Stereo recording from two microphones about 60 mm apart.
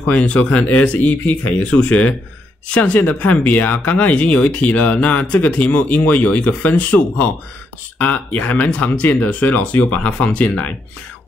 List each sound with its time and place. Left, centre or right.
0.0 s speech: left